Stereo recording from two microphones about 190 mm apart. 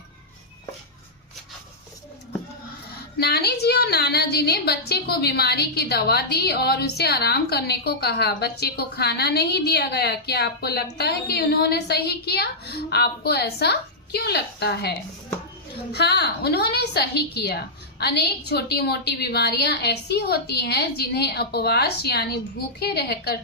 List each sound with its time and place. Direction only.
3.2 s a woman's voice: 60° left (ahead or behind)